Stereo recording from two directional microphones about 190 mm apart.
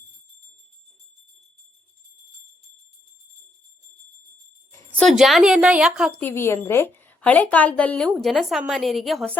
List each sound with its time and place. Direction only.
4.9 s a woman's voice: centre (ahead or behind)
6.1 s a woman's voice: 10° left (ahead or behind)